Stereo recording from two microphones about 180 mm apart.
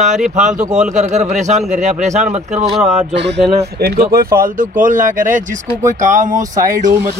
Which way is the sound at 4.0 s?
55° right (ahead or behind).